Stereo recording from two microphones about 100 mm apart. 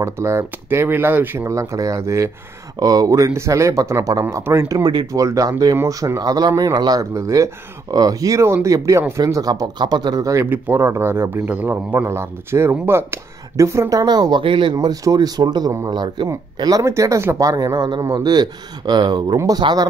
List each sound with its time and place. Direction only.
0.0 s speech: 30° right (ahead or behind)
10.5 s speech: 25° right (ahead or behind); by 14.4 s 45° right (ahead or behind)
14.4 s speech: 55° right (ahead or behind); by 16.8 s 40° right (ahead or behind)
16.8 s speech: 30° right (ahead or behind); by 19.3 s 45° right (ahead or behind)
19.3 s speech: 35° right (ahead or behind)